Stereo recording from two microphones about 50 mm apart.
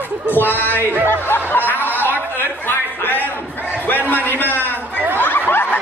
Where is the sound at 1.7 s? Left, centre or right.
Left.